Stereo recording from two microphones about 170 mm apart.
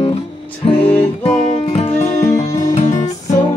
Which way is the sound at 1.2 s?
40° left (ahead or behind).